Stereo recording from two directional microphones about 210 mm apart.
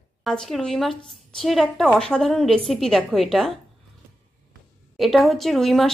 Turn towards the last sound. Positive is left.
turn(degrees=0)  # may be behind; listen again after turning